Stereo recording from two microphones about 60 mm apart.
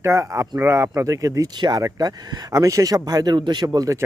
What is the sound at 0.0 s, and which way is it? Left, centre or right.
Speech, right.